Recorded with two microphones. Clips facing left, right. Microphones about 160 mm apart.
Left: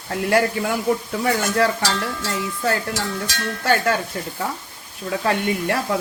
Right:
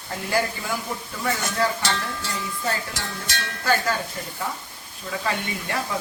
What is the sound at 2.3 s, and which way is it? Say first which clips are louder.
Speech: left 6 dB; 70° left (ahead or behind).